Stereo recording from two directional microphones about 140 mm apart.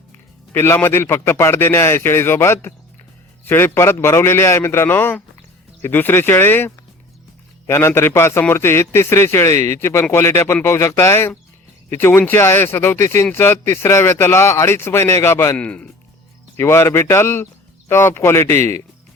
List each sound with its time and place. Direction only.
0.5 s a man's voice: 15° left (ahead or behind)
16.6 s speech: 20° left (ahead or behind)